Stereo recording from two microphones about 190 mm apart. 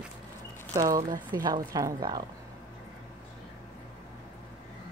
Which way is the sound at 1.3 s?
20° right (ahead or behind).